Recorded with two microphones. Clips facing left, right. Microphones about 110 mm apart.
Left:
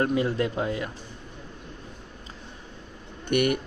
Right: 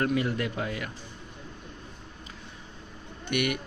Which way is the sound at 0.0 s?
25° left (ahead or behind).